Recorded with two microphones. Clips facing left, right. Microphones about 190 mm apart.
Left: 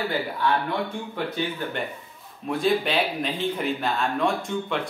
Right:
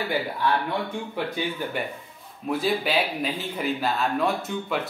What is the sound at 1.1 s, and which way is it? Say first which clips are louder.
Speech: even; 10° right (ahead or behind).